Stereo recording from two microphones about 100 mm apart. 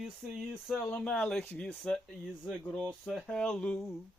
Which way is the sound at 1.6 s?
10° left (ahead or behind).